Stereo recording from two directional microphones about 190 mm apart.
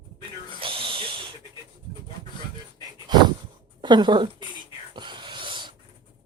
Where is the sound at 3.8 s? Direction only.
25° right (ahead or behind).